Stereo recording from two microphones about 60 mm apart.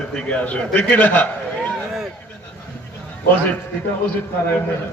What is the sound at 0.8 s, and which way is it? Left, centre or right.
Speech, left.